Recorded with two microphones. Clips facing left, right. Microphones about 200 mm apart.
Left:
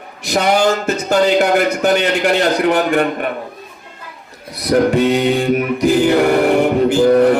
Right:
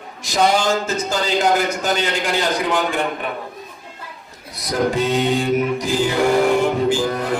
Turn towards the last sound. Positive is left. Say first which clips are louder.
# left 8 dB
turn(degrees=60)  # may be behind; listen again after turning